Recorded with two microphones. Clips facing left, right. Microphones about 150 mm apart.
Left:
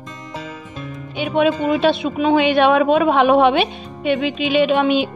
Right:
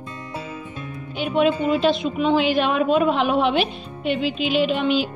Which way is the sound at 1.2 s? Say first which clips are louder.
Left 2 dB; 75° left (ahead or behind).